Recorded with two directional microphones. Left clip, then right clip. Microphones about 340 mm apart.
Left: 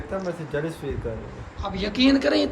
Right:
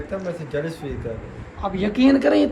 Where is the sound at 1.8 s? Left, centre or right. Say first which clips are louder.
Right 3 dB; centre.